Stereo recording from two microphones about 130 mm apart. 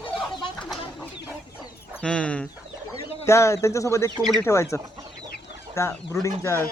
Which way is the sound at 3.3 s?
20° left (ahead or behind).